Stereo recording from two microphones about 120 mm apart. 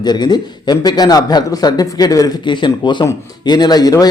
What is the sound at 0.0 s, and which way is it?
A man's voice, 35° left (ahead or behind).